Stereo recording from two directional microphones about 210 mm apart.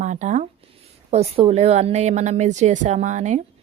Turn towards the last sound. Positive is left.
turn(degrees=-35)  # may be behind; listen again after turning